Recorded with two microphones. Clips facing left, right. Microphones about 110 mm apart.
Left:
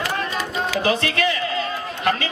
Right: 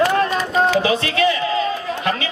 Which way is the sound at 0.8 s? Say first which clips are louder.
Right 3 dB; 45° left (ahead or behind).